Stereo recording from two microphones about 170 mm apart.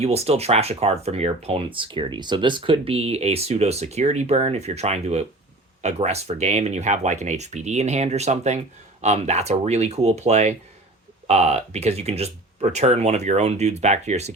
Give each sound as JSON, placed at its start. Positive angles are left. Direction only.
{"t": 0.0, "sound": "speech", "side_deg": -35}